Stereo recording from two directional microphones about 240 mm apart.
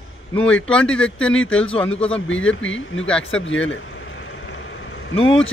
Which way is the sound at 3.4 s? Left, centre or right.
Left.